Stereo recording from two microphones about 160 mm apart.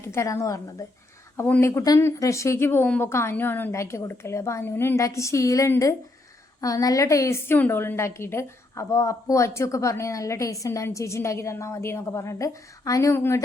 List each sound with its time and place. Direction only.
0.0 s a woman's voice: 15° left (ahead or behind)